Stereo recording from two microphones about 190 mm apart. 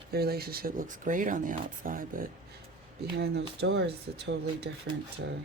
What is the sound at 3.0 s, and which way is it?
Speech, 60° right (ahead or behind).